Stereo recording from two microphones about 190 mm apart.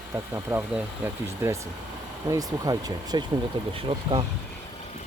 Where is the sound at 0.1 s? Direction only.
15° right (ahead or behind).